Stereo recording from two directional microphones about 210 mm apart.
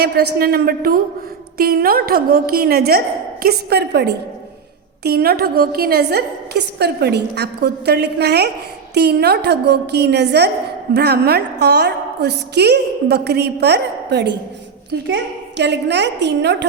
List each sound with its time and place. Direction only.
0.3 s a woman's voice: 45° right (ahead or behind)